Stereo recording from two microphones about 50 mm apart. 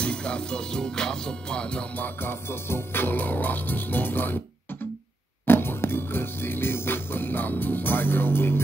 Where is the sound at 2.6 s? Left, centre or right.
Left.